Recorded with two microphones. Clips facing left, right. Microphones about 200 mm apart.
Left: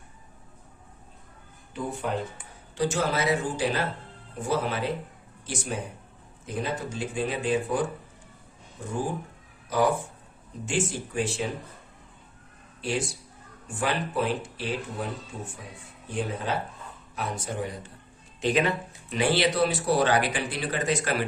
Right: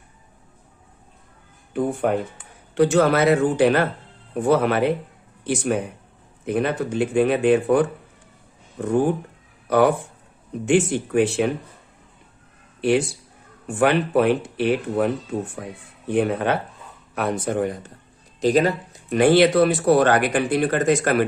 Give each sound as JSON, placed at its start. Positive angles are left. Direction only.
{"t": 1.7, "sound": "speech", "side_deg": -55}
{"t": 12.8, "sound": "speech", "side_deg": -65}
{"t": 18.3, "sound": "speech", "side_deg": -40}